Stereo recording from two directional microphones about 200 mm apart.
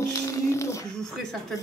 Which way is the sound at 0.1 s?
15° left (ahead or behind).